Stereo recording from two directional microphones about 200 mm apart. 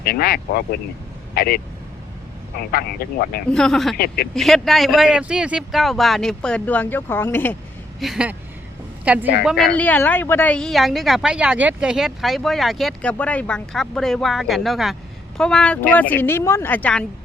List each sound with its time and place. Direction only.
0.0 s speech: 50° left (ahead or behind)
3.5 s speech: 5° left (ahead or behind)
3.9 s speech: 50° left (ahead or behind)
4.4 s speech: centre (ahead or behind)
7.9 s speech: centre (ahead or behind)
9.7 s speech: 10° left (ahead or behind)